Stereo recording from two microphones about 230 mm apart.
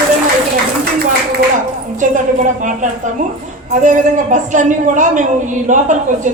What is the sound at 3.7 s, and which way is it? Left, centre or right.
A man's voice, right.